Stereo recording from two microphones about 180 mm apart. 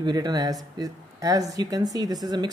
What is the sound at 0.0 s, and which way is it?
Speech, 25° right (ahead or behind).